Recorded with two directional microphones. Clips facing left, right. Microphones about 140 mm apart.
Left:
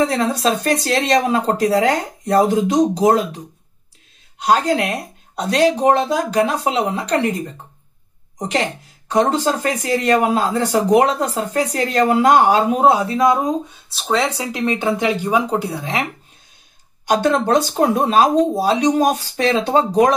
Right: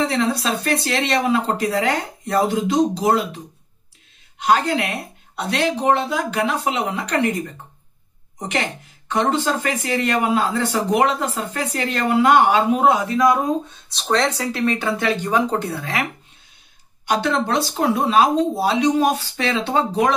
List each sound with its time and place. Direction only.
0.0 s speech: 40° left (ahead or behind)
4.4 s speech: 40° left (ahead or behind)
8.4 s speech: 35° left (ahead or behind)
13.7 s speech: 5° left (ahead or behind)
17.0 s speech: 45° left (ahead or behind)